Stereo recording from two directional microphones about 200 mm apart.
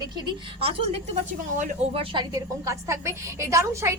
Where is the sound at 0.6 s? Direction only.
30° right (ahead or behind).